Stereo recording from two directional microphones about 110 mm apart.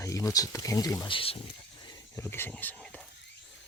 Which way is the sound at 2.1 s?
20° left (ahead or behind).